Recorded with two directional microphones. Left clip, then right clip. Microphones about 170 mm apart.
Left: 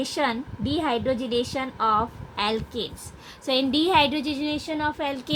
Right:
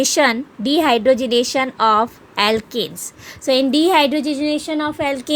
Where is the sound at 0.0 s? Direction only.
65° right (ahead or behind).